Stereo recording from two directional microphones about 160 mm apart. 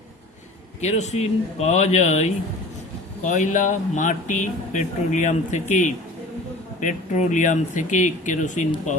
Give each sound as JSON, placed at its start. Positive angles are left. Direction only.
{"t": 0.8, "sound": "speech", "side_deg": 45}